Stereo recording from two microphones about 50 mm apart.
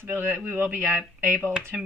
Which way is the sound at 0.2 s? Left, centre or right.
Right.